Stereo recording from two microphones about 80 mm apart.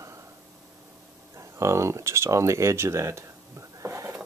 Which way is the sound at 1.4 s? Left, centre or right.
Right.